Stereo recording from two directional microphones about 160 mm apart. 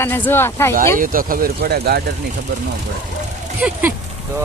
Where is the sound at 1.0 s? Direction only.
60° right (ahead or behind); by 2.0 s 80° right.